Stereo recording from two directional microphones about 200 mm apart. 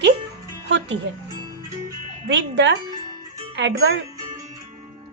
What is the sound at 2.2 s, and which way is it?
Speech, 65° right (ahead or behind).